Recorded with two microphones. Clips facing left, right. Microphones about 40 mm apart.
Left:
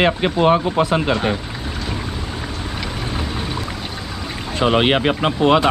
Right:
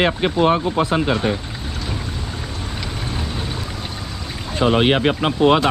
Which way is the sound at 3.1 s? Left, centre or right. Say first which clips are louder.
Left 2 dB; centre.